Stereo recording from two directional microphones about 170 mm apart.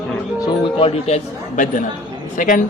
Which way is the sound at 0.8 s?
35° left (ahead or behind).